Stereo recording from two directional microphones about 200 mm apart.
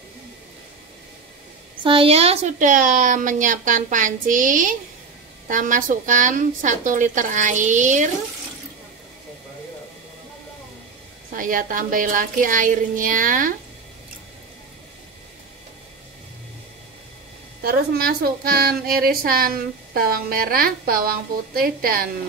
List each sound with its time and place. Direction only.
1.8 s a woman's voice: 25° right (ahead or behind)
11.3 s a woman's voice: 45° right (ahead or behind)
17.6 s a woman's voice: 50° right (ahead or behind)